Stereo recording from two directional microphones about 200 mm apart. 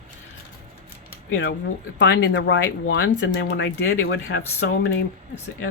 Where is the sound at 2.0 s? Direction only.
65° left (ahead or behind).